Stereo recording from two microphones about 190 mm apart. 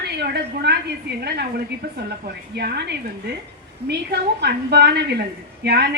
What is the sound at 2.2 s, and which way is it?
A woman's voice, 60° right (ahead or behind).